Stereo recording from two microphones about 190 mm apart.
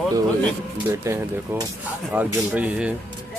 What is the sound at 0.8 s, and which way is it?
Speech, 15° right (ahead or behind).